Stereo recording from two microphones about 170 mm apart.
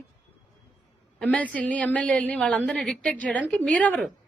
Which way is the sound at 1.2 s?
10° left (ahead or behind).